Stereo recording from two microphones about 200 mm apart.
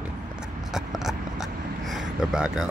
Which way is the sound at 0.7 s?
Centre (ahead or behind).